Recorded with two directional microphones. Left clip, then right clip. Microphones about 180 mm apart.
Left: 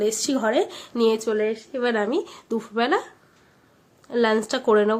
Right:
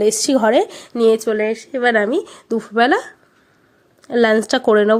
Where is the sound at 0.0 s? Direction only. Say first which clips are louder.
Right 8 dB; 40° right (ahead or behind).